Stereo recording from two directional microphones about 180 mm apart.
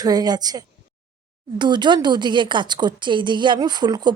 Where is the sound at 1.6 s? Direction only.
25° right (ahead or behind).